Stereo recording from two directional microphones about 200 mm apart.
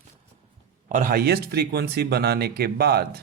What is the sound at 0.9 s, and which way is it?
Speech, 40° right (ahead or behind).